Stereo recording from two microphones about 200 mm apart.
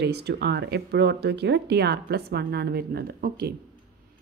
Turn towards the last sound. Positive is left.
turn(degrees=-45)  # may be behind; listen again after turning